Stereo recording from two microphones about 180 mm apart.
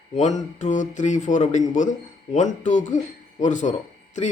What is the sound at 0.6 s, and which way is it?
A man's voice, 45° left (ahead or behind).